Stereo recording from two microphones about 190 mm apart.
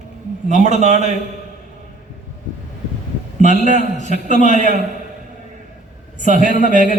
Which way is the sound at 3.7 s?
40° left (ahead or behind).